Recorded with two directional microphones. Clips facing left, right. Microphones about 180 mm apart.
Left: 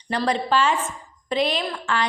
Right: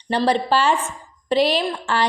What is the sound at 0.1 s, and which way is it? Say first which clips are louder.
A woman's voice: right 3 dB; 35° right (ahead or behind).